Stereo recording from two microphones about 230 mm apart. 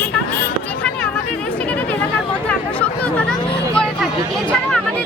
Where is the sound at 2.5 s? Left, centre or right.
Centre.